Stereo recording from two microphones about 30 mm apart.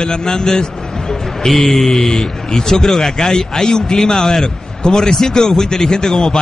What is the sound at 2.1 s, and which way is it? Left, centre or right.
A man's voice, left.